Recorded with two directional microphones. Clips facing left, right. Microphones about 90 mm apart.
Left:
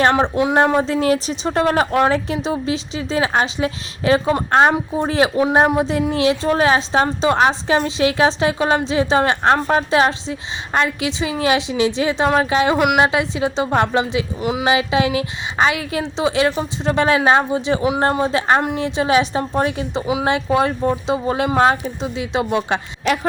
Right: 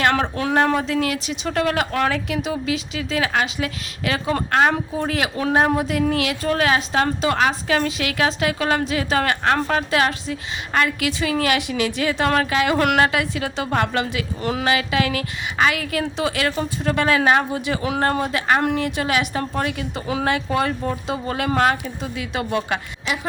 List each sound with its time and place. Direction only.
0.0 s speech: 25° left (ahead or behind)
12.7 s a woman's voice: 10° left (ahead or behind)
13.1 s speech: 25° left (ahead or behind)